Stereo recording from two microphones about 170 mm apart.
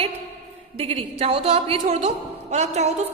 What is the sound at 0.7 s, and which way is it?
A woman's voice, 35° right (ahead or behind).